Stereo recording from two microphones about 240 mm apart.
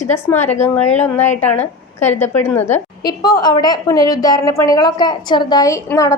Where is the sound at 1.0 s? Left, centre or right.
Centre.